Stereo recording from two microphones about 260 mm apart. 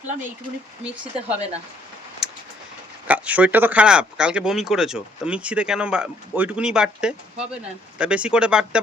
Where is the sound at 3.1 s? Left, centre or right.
Centre.